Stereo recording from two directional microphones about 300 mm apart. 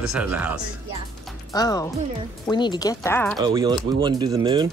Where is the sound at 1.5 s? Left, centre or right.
Centre.